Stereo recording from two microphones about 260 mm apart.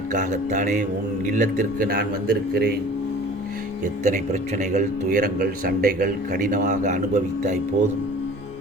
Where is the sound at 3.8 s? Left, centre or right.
Right.